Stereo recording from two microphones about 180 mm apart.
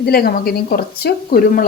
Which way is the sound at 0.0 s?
60° left (ahead or behind).